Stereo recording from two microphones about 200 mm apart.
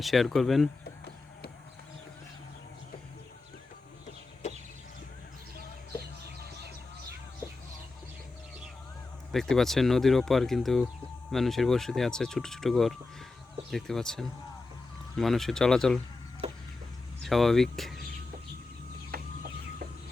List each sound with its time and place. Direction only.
0.0 s speech: centre (ahead or behind)
4.4 s chicken: 35° left (ahead or behind)
9.3 s speech: centre (ahead or behind)
16.4 s a sound: 30° right (ahead or behind)
17.2 s speech: centre (ahead or behind)
19.1 s a sound: 50° right (ahead or behind)